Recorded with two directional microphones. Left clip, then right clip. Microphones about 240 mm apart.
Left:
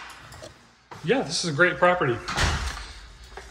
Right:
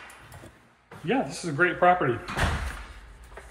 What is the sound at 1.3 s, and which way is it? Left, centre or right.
Speech, centre.